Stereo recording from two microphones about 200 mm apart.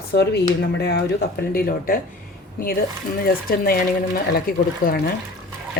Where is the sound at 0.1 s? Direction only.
55° left (ahead or behind).